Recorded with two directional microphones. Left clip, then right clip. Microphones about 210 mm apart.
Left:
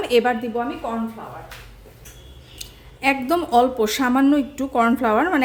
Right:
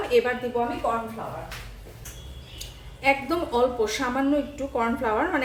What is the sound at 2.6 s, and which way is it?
A woman's voice, 55° left (ahead or behind).